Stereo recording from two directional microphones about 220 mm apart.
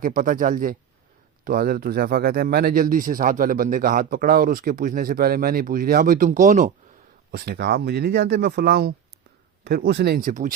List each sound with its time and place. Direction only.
0.0 s speech: 35° right (ahead or behind)